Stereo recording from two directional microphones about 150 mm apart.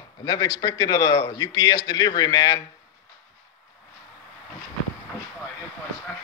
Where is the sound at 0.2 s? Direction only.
25° left (ahead or behind).